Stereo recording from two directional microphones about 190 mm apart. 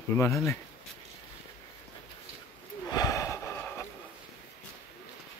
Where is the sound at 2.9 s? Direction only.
20° left (ahead or behind).